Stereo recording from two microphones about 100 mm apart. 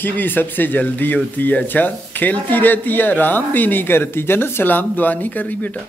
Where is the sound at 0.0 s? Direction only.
20° left (ahead or behind).